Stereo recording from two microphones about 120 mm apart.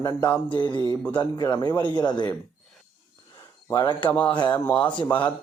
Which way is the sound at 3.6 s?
35° left (ahead or behind).